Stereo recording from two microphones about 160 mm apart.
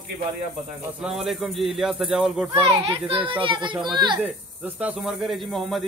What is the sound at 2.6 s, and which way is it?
A child's voice, 35° right (ahead or behind).